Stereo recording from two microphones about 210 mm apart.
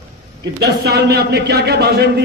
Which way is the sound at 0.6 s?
50° right (ahead or behind).